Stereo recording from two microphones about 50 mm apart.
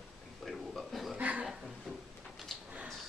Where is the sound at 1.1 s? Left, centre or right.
Right.